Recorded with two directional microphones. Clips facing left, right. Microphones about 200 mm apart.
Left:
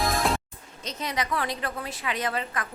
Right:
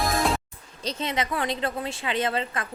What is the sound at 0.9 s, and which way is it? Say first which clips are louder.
A woman's voice: right 2 dB; 25° right (ahead or behind).